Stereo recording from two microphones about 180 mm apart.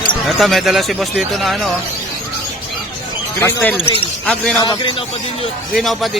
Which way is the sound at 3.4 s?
10° left (ahead or behind).